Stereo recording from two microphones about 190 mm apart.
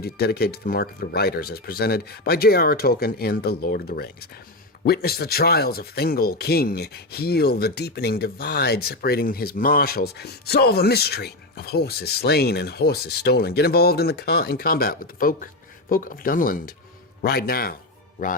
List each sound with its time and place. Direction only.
0.0 s speech: 55° left (ahead or behind)